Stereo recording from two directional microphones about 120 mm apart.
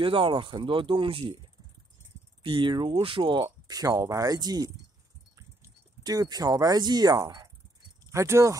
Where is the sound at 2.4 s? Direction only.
40° right (ahead or behind).